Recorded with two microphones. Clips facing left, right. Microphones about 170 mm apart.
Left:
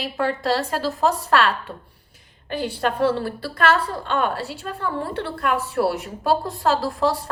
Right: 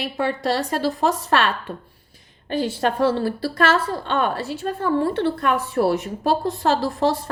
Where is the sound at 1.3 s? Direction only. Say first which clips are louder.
Left 2 dB; 20° right (ahead or behind).